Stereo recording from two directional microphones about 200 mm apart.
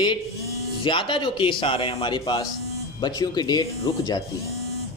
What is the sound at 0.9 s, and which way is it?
A man's voice, 25° left (ahead or behind).